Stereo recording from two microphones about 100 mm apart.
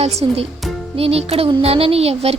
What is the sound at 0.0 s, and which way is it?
Speech, 90° right.